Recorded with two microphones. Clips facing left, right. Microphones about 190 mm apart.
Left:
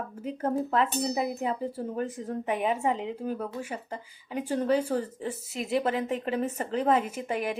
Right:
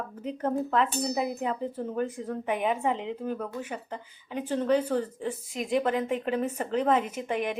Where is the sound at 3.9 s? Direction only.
10° left (ahead or behind).